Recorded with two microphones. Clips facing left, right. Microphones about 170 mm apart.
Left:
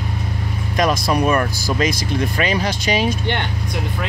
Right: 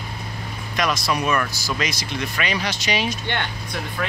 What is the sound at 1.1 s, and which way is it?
Speech, 35° left (ahead or behind).